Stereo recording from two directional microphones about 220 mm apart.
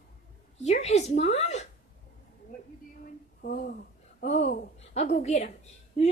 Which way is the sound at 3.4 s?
40° left (ahead or behind).